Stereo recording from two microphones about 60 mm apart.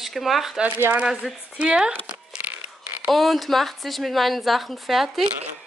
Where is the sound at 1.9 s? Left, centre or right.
Right.